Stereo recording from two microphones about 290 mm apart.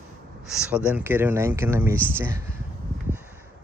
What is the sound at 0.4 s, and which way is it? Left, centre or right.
Speech, centre.